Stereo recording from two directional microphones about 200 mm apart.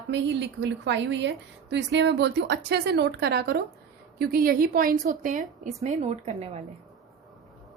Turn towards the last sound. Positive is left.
turn(degrees=-35)  # may be behind; listen again after turning